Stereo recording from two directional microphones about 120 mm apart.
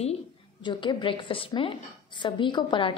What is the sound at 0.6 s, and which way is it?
A woman's voice, 45° left (ahead or behind).